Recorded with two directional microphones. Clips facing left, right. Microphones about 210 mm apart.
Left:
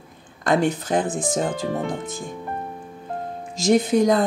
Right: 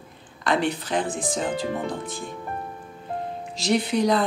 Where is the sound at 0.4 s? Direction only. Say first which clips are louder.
Left 4 dB; 45° left (ahead or behind).